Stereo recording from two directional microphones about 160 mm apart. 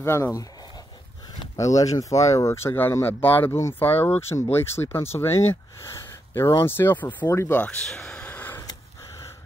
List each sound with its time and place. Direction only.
0.0 s speech: 15° left (ahead or behind)
1.6 s speech: 20° left (ahead or behind)